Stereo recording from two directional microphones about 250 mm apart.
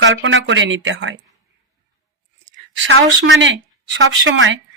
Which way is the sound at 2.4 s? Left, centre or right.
Right.